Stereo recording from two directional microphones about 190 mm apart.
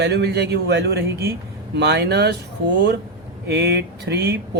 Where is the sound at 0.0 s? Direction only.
60° right (ahead or behind).